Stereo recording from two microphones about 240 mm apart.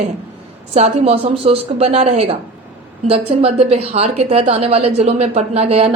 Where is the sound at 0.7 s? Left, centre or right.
Right.